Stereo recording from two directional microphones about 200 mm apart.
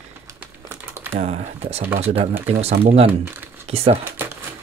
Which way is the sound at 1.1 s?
35° right (ahead or behind).